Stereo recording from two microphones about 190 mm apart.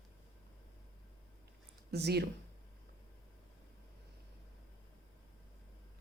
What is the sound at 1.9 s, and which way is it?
Speech, 60° right (ahead or behind).